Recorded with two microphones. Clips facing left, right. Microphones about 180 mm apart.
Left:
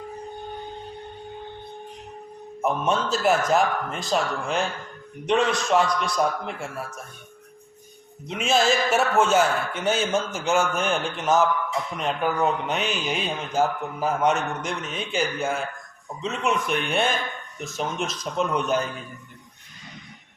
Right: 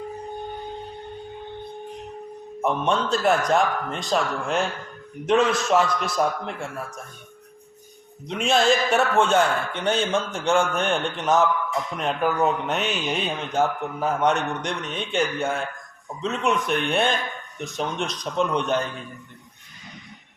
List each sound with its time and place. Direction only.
2.6 s speech: 5° left (ahead or behind)
8.3 s speech: centre (ahead or behind)